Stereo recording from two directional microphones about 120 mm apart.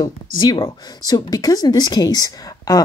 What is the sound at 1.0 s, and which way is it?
Speech, 30° left (ahead or behind).